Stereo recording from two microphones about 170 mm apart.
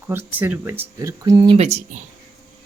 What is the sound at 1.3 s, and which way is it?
Speech, 30° right (ahead or behind).